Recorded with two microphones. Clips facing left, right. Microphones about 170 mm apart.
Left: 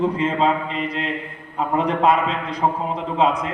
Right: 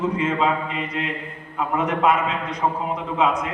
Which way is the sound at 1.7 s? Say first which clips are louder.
Left 2 dB; 30° left (ahead or behind).